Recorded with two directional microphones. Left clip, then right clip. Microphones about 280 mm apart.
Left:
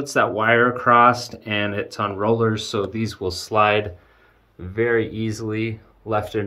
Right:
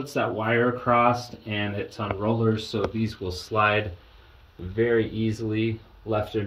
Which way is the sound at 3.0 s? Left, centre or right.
Centre.